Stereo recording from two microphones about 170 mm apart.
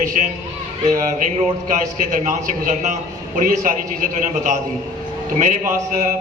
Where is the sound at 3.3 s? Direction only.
50° right (ahead or behind).